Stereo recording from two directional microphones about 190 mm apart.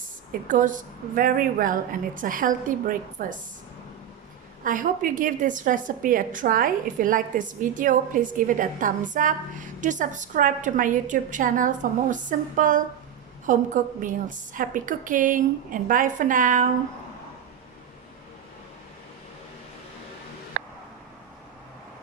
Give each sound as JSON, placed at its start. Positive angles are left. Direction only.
{"t": 0.4, "sound": "a woman's voice", "side_deg": -45}
{"t": 4.6, "sound": "a woman's voice", "side_deg": -45}
{"t": 20.6, "sound": "a sound", "side_deg": -50}